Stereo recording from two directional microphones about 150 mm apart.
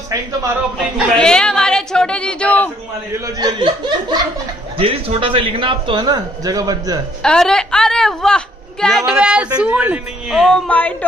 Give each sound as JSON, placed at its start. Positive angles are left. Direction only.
{"t": 0.9, "sound": "a woman's voice", "side_deg": 5}
{"t": 3.3, "sound": "chuckle", "side_deg": -30}
{"t": 4.7, "sound": "a man's voice", "side_deg": -40}
{"t": 7.2, "sound": "a woman's voice", "side_deg": 5}
{"t": 10.3, "sound": "speech", "side_deg": 5}